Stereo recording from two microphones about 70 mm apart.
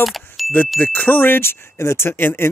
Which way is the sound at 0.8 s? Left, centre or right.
Left.